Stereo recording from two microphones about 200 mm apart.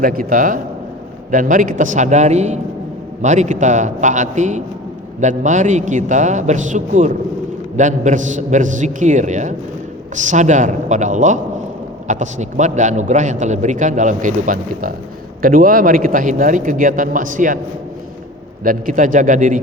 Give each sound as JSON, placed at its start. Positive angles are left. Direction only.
{"t": 0.0, "sound": "a man's voice", "side_deg": -45}
{"t": 18.6, "sound": "a man's voice", "side_deg": -45}